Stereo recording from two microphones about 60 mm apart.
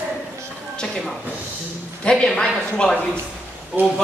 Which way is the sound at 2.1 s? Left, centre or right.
Centre.